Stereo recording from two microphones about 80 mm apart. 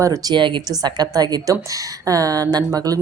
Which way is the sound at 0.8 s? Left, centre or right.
Right.